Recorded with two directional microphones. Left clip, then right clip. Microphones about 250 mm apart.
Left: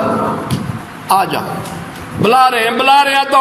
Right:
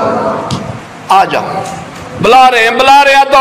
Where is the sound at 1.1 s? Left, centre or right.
Left.